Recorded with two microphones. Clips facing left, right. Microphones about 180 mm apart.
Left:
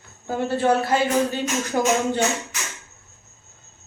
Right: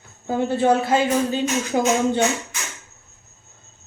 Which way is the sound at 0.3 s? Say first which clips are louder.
Right 2 dB; 20° right (ahead or behind).